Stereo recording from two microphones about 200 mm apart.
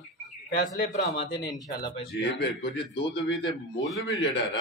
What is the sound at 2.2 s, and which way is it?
Speech, 55° left (ahead or behind).